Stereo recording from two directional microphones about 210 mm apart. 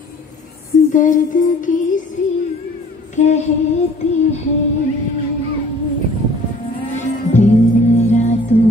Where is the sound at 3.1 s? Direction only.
35° left (ahead or behind).